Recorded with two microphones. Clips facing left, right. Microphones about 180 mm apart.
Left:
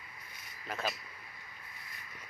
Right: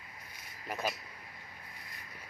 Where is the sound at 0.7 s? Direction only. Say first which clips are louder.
Right 1 dB; 10° right (ahead or behind).